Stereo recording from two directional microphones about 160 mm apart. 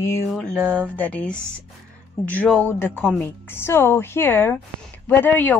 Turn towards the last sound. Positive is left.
turn(degrees=10)  # may be behind; listen again after turning